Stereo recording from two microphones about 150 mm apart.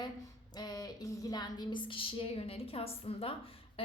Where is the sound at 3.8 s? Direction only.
40° left (ahead or behind).